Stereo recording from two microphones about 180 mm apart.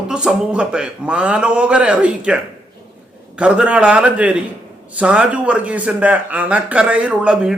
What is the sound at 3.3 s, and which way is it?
A man's voice, 5° right (ahead or behind).